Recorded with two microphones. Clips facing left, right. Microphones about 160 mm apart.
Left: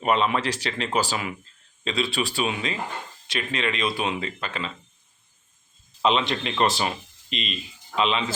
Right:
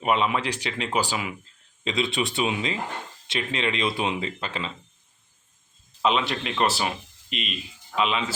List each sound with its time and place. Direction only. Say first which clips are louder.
0.0 s speech: left 1 dB; 10° right (ahead or behind); by 4.7 s 25° right (ahead or behind)
6.0 s speech: left 1 dB; 5° right (ahead or behind)